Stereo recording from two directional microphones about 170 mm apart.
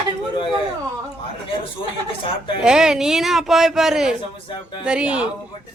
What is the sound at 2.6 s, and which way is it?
Speech, 5° right (ahead or behind).